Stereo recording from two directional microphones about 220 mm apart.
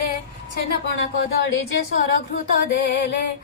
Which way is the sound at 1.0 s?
60° left (ahead or behind).